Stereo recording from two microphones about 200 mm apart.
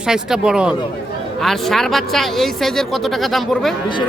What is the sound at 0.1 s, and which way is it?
A man's voice, 5° right (ahead or behind).